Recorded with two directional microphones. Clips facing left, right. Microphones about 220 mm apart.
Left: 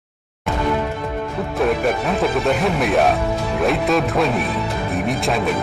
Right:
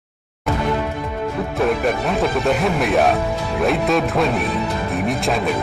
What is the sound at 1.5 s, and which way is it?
Speech, centre (ahead or behind).